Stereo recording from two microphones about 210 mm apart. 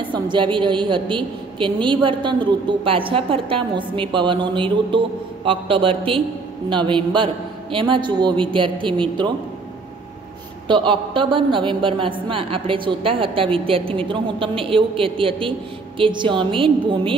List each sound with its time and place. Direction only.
0.0 s a woman's voice: 20° right (ahead or behind)
10.7 s a woman's voice: 25° right (ahead or behind)